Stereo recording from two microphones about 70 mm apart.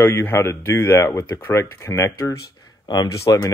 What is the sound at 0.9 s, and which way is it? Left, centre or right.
Speech, left.